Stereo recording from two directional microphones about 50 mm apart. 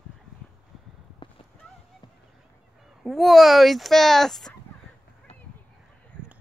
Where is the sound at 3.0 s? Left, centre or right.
Centre.